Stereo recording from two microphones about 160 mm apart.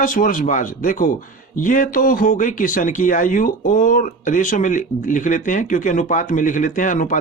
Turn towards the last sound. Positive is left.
turn(degrees=55)  # may be behind; listen again after turning